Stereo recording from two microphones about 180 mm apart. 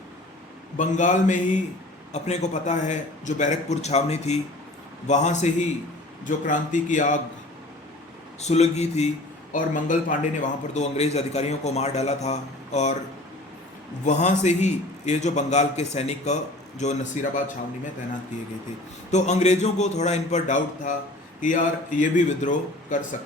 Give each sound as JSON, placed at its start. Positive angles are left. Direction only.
{"t": 0.8, "sound": "a man's voice", "side_deg": 45}
{"t": 8.4, "sound": "a man's voice", "side_deg": 40}
{"t": 14.0, "sound": "a man's voice", "side_deg": 40}
{"t": 19.1, "sound": "a man's voice", "side_deg": 40}